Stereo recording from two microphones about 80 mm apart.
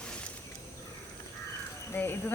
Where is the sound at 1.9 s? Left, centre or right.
Left.